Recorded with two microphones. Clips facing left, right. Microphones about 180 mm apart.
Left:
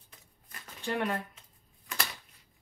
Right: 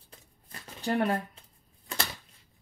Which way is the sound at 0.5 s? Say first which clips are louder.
Right 4 dB; 35° right (ahead or behind).